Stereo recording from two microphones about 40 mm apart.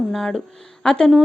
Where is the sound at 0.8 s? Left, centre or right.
Left.